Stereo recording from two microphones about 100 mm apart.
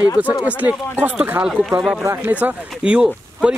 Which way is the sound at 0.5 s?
15° right (ahead or behind).